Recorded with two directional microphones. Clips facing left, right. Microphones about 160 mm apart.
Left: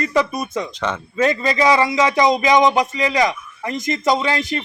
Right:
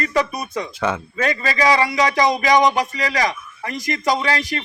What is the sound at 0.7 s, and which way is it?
Speech, 10° right (ahead or behind).